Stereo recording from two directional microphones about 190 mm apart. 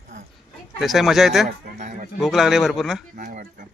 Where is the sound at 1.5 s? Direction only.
45° right (ahead or behind).